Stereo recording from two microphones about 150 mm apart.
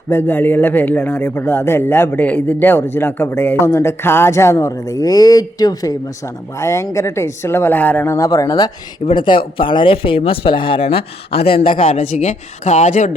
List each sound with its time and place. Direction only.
0.1 s speech: 15° left (ahead or behind); by 13.1 s 60° left (ahead or behind)